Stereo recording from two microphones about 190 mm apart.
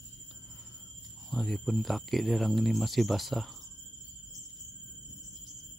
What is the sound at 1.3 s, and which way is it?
Speech, centre (ahead or behind).